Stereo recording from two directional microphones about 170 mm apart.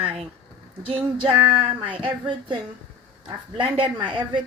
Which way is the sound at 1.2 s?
30° right (ahead or behind).